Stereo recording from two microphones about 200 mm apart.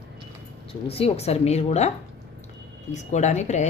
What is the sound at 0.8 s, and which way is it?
A woman's voice, 30° left (ahead or behind).